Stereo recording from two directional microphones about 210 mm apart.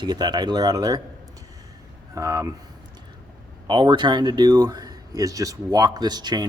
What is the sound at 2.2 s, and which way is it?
Speech, 15° right (ahead or behind).